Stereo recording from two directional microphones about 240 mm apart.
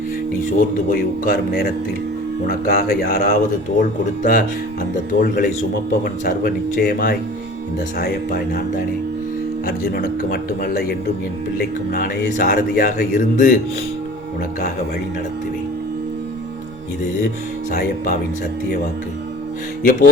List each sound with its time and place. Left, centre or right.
0.9 s speech: left
9.6 s speech: left
17.7 s speech: left
19.8 s speech: left